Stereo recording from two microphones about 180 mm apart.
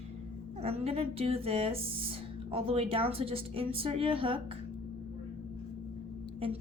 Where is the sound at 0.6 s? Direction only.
35° right (ahead or behind).